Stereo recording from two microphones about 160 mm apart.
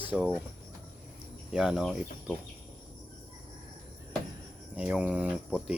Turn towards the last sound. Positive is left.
turn(degrees=-5)  # may be behind; listen again after turning